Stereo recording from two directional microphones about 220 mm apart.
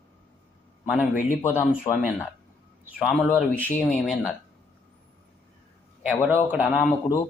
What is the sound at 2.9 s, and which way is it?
A man's voice, centre (ahead or behind).